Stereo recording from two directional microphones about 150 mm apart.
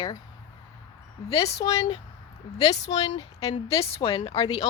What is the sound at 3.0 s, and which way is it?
Speech, 40° left (ahead or behind).